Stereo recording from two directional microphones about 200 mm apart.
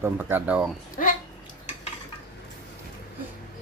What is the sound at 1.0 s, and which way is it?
Speech, 40° left (ahead or behind).